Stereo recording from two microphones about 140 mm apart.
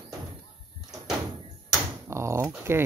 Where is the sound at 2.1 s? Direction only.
20° right (ahead or behind).